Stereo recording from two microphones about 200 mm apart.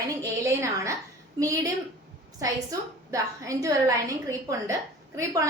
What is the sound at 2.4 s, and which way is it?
A woman's voice, 15° right (ahead or behind).